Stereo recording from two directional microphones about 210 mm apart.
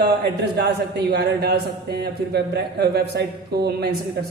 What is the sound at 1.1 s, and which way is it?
A man's voice, 50° right (ahead or behind).